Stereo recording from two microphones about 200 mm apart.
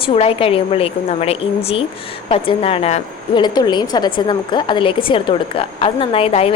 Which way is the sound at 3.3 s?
20° left (ahead or behind).